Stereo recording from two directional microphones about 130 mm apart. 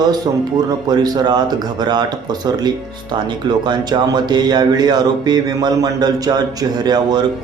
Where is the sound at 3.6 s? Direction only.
35° right (ahead or behind).